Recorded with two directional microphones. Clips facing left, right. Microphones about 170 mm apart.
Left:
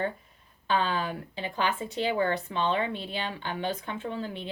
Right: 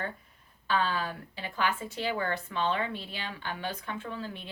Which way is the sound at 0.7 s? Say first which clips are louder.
Left 2 dB; 20° left (ahead or behind).